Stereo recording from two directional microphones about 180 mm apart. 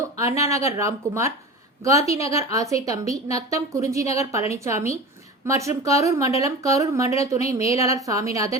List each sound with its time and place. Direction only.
0.2 s speech: 15° right (ahead or behind)